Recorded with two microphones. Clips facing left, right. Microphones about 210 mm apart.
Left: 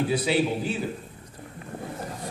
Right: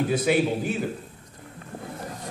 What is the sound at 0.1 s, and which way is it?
Speech, 50° right (ahead or behind).